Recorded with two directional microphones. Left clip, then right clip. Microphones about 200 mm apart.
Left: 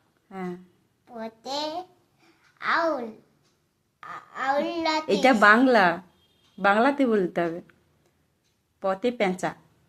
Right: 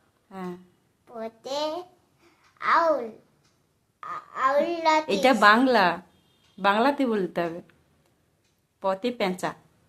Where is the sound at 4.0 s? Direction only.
20° right (ahead or behind).